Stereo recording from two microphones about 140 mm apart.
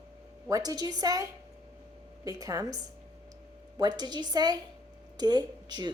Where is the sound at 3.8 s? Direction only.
30° right (ahead or behind).